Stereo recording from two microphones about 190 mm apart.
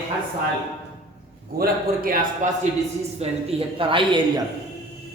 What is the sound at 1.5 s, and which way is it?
Speech, 50° right (ahead or behind).